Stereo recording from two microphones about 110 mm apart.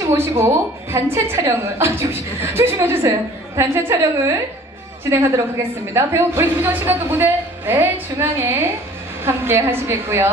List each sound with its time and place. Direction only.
0.0 s a woman's voice: 25° right (ahead or behind)